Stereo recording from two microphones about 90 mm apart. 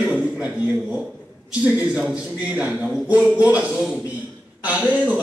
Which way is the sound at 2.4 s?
15° right (ahead or behind).